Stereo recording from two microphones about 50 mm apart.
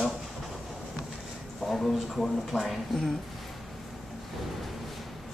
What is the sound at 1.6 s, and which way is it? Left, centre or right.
Speech, centre.